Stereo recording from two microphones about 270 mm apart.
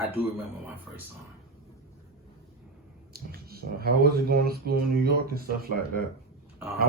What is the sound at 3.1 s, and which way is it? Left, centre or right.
Speech, right.